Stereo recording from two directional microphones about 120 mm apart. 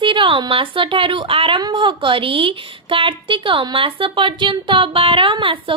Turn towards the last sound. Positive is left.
turn(degrees=-45)  # may be behind; listen again after turning